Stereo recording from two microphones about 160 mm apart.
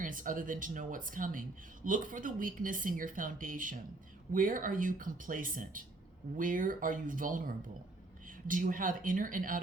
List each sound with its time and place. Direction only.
0.0 s speech: 55° right (ahead or behind)